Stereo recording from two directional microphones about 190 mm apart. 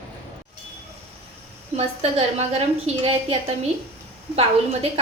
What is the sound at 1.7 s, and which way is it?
A woman's voice, 35° right (ahead or behind).